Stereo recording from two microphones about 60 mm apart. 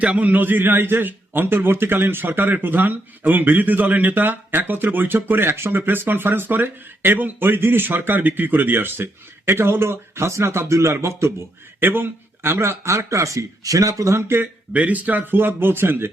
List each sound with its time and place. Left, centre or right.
0.0 s a man's voice: right
11.8 s a man's voice: right
14.7 s a man's voice: right